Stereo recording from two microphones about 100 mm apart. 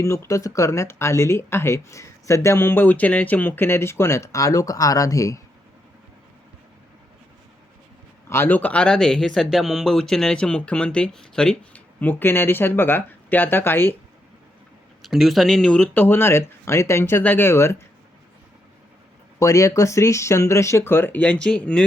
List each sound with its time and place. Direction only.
0.0 s speech: 30° left (ahead or behind)
8.3 s speech: 20° left (ahead or behind)
15.0 s speech: centre (ahead or behind)
16.0 s speech: 20° left (ahead or behind)
19.4 s speech: 30° left (ahead or behind); by 21.8 s 10° left (ahead or behind)